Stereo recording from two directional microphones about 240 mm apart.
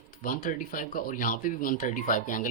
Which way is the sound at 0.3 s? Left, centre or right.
Left.